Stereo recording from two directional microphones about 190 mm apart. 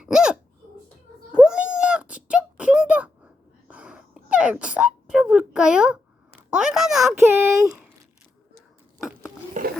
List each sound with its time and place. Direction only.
0.0 s hiccup: 5° right (ahead or behind)
1.3 s a sound: 5° right (ahead or behind)
7.2 s speech: 15° right (ahead or behind)
9.6 s roaring cats: 45° right (ahead or behind)